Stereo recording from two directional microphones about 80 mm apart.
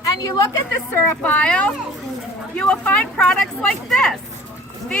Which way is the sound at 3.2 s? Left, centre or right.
Centre.